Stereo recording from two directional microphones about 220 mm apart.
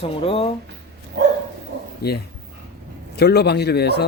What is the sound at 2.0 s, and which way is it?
Speech, 45° left (ahead or behind).